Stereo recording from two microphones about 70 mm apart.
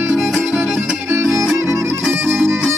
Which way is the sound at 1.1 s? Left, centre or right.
Right.